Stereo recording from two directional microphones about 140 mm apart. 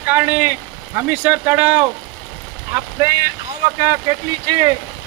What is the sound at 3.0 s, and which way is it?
Speech, 25° right (ahead or behind).